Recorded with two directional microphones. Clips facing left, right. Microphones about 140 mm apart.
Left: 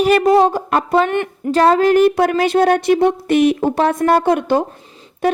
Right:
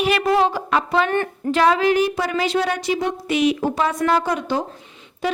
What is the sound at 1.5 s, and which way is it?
A woman's voice, 40° left (ahead or behind).